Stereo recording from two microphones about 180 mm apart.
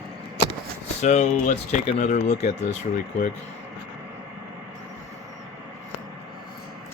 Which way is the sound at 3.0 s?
50° left (ahead or behind).